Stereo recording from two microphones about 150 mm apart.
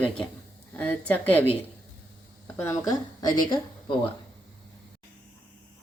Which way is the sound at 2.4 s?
10° left (ahead or behind).